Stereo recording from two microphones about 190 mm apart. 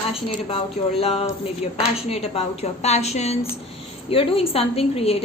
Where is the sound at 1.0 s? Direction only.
30° left (ahead or behind).